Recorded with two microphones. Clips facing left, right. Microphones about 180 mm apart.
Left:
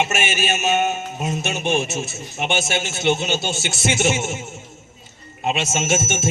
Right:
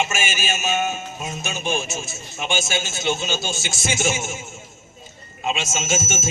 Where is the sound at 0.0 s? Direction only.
65° left (ahead or behind).